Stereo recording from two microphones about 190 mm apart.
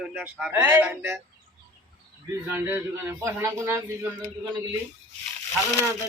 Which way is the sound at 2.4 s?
10° right (ahead or behind).